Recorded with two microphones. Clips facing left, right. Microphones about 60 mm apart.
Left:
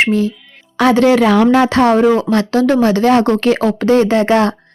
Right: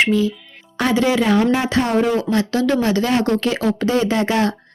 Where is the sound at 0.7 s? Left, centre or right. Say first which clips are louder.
Left 7 dB; left.